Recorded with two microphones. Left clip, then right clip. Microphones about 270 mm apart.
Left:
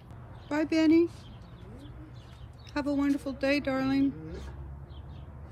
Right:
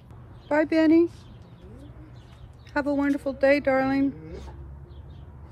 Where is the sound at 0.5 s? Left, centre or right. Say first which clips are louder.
Right 5 dB; centre.